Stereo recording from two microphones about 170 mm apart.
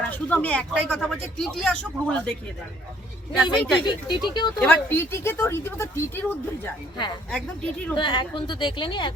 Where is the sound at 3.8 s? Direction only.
25° left (ahead or behind).